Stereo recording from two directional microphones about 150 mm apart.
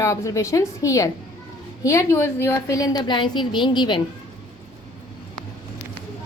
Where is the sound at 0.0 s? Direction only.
20° left (ahead or behind).